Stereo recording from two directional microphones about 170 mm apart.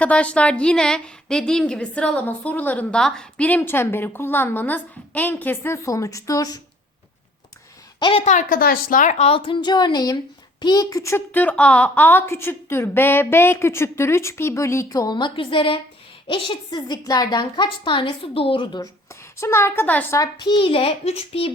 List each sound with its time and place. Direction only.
0.0 s a woman's voice: 5° left (ahead or behind)
7.9 s a woman's voice: 30° left (ahead or behind)
8.2 s a woman's voice: 45° left (ahead or behind); by 18.9 s 25° left (ahead or behind)
19.4 s a child's voice: 15° left (ahead or behind); by 21.5 s 35° left (ahead or behind)